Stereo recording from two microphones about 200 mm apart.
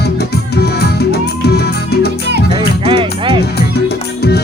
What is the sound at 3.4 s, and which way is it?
Music, 55° left (ahead or behind).